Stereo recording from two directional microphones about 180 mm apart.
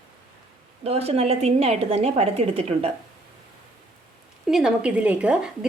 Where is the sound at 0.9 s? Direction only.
35° right (ahead or behind).